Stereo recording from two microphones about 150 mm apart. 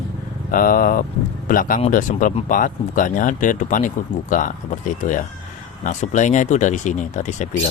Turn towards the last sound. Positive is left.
turn(degrees=55)  # may be behind; listen again after turning